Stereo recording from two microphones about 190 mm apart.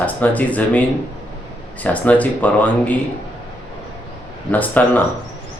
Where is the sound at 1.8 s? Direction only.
10° left (ahead or behind).